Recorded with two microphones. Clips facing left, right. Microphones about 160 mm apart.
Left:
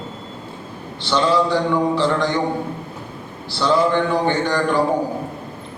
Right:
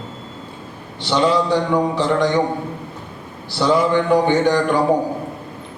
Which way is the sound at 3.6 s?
15° right (ahead or behind).